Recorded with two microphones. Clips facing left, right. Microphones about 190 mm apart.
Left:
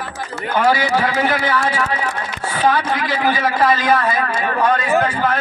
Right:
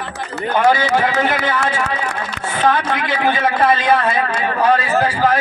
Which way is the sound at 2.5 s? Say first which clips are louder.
Even; 20° right (ahead or behind).